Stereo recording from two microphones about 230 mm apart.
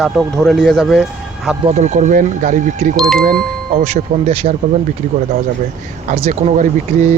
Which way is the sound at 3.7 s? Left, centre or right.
Right.